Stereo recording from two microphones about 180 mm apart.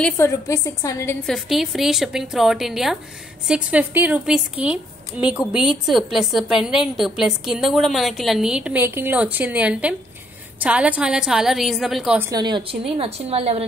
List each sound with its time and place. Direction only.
0.0 s a woman's voice: 15° left (ahead or behind)
1.2 s a woman's voice: centre (ahead or behind)
12.2 s a woman's voice: 20° right (ahead or behind)